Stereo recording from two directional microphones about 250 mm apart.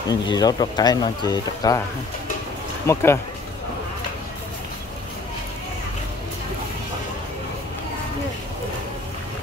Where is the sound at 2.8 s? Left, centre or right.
Centre.